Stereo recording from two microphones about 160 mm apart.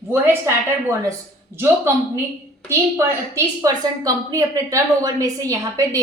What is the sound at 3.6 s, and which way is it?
A woman's voice, 20° right (ahead or behind).